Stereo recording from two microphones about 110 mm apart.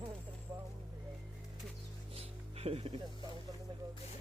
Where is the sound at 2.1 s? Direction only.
65° right (ahead or behind).